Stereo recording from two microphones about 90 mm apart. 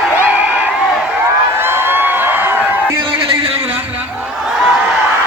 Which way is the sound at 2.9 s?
75° right (ahead or behind).